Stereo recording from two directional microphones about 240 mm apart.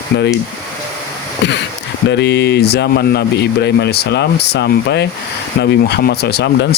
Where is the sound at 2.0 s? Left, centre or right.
Left.